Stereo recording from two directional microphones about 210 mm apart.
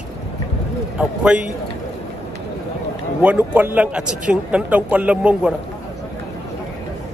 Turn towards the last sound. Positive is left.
turn(degrees=-5)  # may be behind; listen again after turning